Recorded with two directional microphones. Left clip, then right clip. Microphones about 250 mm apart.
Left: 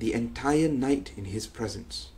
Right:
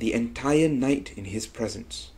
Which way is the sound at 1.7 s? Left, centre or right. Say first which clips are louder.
Right 1 dB; left.